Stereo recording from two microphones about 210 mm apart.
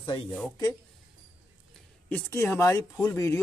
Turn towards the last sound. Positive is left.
turn(degrees=15)  # may be behind; listen again after turning